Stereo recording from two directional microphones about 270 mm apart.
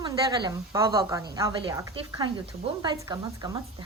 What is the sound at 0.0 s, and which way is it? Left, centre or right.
A woman's voice, centre.